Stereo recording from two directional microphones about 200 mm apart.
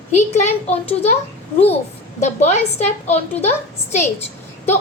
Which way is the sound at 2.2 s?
35° left (ahead or behind).